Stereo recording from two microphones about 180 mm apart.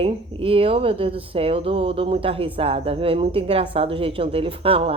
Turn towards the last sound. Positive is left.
turn(degrees=-30)  # may be behind; listen again after turning